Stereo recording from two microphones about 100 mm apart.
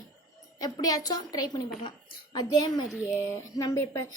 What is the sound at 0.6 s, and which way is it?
A woman's voice, 40° left (ahead or behind).